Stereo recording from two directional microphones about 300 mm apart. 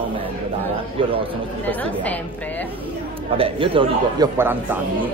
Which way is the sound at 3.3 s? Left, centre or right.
Centre.